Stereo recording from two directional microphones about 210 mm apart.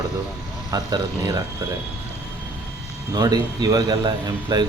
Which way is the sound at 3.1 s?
20° right (ahead or behind).